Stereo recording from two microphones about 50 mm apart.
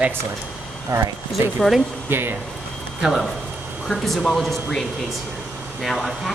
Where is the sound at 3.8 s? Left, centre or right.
Centre.